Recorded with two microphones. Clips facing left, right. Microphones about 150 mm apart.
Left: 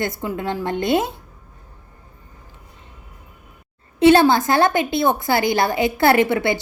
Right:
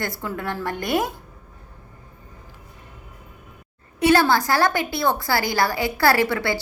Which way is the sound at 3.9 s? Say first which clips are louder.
Left 5 dB; 25° left (ahead or behind).